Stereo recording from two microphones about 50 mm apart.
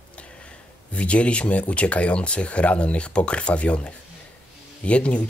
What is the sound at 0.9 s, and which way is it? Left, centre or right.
Speech, left.